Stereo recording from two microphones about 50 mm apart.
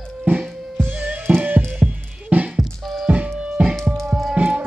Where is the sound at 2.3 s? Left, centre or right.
Right.